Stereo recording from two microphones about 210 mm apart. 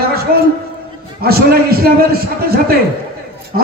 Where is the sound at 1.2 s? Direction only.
45° right (ahead or behind).